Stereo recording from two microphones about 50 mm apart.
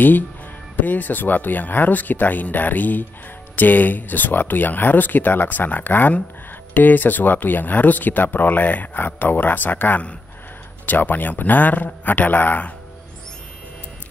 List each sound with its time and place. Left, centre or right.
0.7 s speech: left